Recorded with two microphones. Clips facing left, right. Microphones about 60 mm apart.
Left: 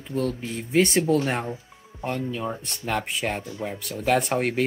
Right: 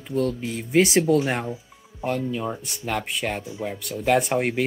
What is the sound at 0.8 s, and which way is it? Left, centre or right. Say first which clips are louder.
Speech: right 2 dB; centre.